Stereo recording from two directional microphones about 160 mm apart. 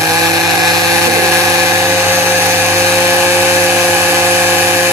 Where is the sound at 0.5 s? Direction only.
25° right (ahead or behind).